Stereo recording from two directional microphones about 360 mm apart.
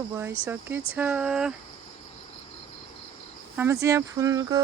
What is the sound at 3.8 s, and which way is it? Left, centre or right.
Speech, centre.